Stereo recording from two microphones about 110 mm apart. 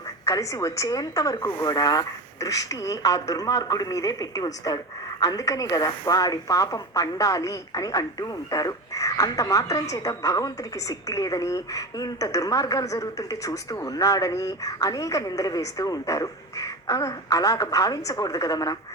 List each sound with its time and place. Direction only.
0.3 s a woman's voice: 30° left (ahead or behind)